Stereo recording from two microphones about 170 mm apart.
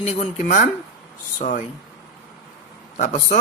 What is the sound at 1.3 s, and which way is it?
Speech, 45° left (ahead or behind).